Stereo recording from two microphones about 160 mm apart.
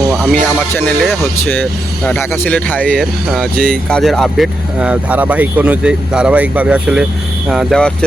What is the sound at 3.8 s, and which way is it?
Speech, 5° left (ahead or behind).